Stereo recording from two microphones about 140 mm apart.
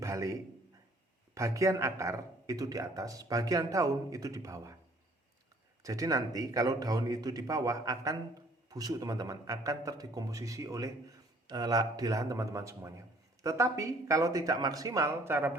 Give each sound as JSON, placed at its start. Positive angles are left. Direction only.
{"t": 0.0, "sound": "a man's voice", "side_deg": -20}
{"t": 1.4, "sound": "speech", "side_deg": -20}
{"t": 5.8, "sound": "speech", "side_deg": -25}